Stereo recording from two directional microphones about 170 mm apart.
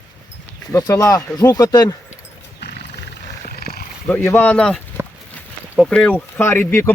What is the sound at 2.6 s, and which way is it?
Horse, 85° left.